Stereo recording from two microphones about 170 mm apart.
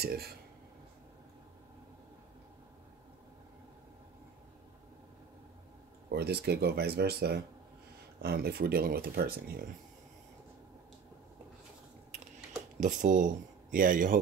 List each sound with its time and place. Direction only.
0.0 s speech: 65° right (ahead or behind)
6.0 s speech: 70° right (ahead or behind)
12.8 s speech: 50° right (ahead or behind)